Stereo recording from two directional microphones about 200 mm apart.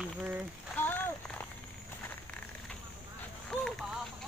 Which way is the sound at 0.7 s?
10° left (ahead or behind).